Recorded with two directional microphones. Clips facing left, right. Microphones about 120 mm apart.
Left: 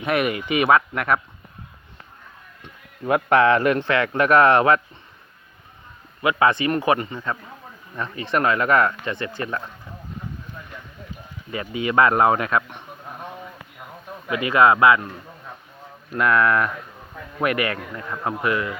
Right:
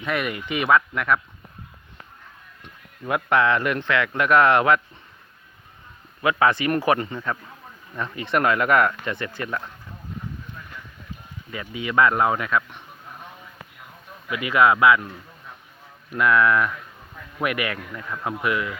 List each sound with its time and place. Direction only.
0.0 s speech: 60° left (ahead or behind)
3.1 s a man's voice: 40° left (ahead or behind)
6.2 s speech: 20° left (ahead or behind)
8.4 s speech: 30° left (ahead or behind)
11.7 s speech: 55° left (ahead or behind)
14.3 s a man's voice: 45° left (ahead or behind)
16.1 s speech: 45° left (ahead or behind)
17.7 s a man's voice: 30° left (ahead or behind)